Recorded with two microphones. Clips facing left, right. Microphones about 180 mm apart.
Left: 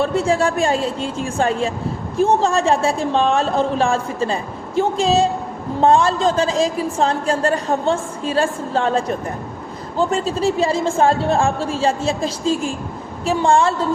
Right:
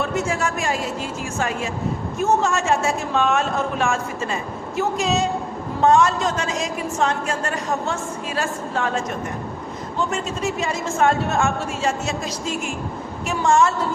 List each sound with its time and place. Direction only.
0.0 s a woman's voice: 30° left (ahead or behind)